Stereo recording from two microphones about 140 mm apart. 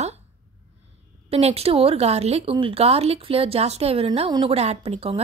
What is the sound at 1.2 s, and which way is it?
Speech, 45° right (ahead or behind).